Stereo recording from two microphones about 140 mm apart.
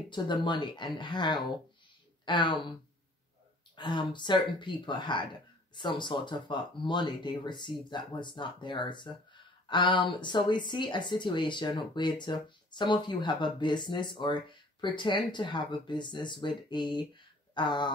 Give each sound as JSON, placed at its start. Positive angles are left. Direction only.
{"t": 0.1, "sound": "speech", "side_deg": 35}
{"t": 3.7, "sound": "speech", "side_deg": 35}